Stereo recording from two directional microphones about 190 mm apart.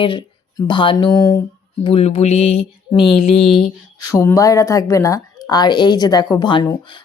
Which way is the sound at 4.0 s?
15° left (ahead or behind).